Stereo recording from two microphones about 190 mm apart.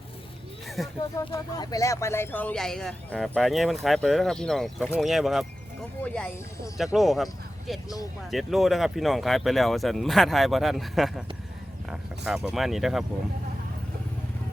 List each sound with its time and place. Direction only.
0.9 s speech: 20° left (ahead or behind); by 13.1 s centre (ahead or behind)